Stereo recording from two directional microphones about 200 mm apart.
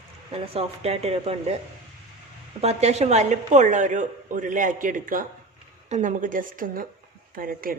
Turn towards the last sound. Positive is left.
turn(degrees=-45)  # may be behind; listen again after turning